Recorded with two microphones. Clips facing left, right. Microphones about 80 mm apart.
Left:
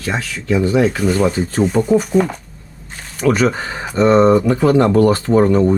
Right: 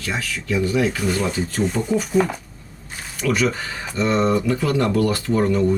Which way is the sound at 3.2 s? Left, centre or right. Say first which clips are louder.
Left 6 dB; left.